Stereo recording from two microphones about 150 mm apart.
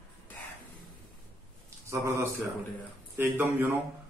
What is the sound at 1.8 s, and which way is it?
A man's voice, 20° right (ahead or behind).